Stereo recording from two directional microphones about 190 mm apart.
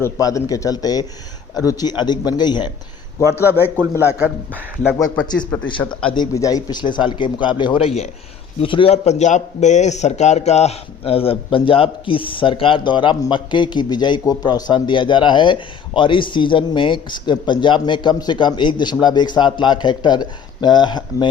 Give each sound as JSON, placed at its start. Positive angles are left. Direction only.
{"t": 0.0, "sound": "a man's voice", "side_deg": 15}
{"t": 3.8, "sound": "a man's voice", "side_deg": -10}
{"t": 5.5, "sound": "a man's voice", "side_deg": 10}